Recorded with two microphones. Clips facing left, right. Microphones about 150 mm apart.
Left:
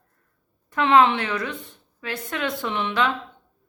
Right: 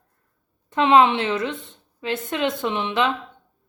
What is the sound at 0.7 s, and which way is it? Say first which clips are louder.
A woman's voice: right 2 dB; 20° right (ahead or behind).